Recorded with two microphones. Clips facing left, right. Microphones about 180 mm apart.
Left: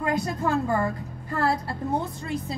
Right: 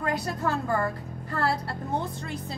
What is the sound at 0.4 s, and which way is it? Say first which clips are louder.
A woman's voice: left 2 dB; 20° left (ahead or behind).